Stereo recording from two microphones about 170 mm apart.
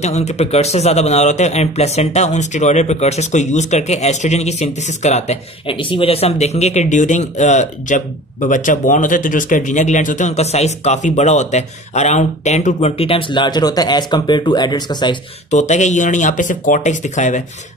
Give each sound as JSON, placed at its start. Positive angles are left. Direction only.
{"t": 0.0, "sound": "a man's voice", "side_deg": 40}
{"t": 15.5, "sound": "speech", "side_deg": 45}